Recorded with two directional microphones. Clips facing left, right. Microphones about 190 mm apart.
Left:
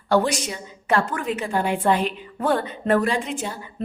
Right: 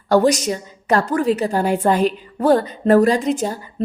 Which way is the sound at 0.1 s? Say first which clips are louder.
Right 6 dB; 40° right (ahead or behind).